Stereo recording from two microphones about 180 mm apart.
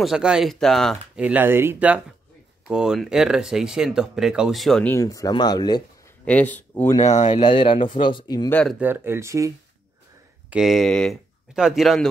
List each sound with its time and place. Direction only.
0.0 s speech: 5° right (ahead or behind)
1.2 s speech: 10° right (ahead or behind)
4.9 s speech: 20° left (ahead or behind)
6.2 s speech: 10° left (ahead or behind)
7.0 s speech: 40° left (ahead or behind)
7.3 s speech: 30° left (ahead or behind)
8.5 s speech: 5° left (ahead or behind)
8.7 s speech: 10° right (ahead or behind)
10.5 s speech: centre (ahead or behind)